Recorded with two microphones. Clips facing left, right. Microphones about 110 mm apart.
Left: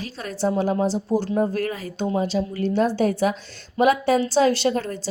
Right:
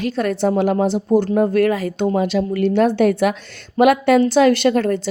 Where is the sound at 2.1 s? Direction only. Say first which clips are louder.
Right 5 dB; 70° right (ahead or behind).